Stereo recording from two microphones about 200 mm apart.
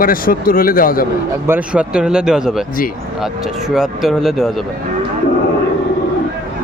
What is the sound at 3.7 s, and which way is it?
Speech, centre (ahead or behind).